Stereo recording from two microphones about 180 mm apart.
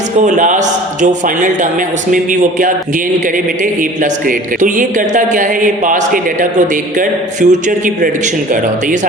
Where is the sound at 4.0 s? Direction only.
45° right (ahead or behind).